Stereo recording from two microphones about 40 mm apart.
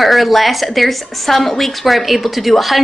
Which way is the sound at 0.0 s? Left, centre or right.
Centre.